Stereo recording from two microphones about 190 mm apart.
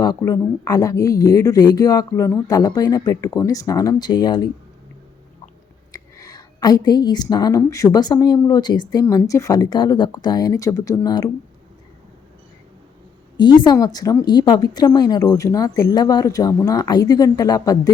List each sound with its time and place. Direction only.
0.0 s a woman's voice: 20° left (ahead or behind)
5.9 s a woman's voice: 20° left (ahead or behind)
13.3 s a woman's voice: 25° left (ahead or behind)